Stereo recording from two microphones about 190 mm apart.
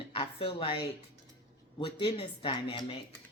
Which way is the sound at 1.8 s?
30° left (ahead or behind).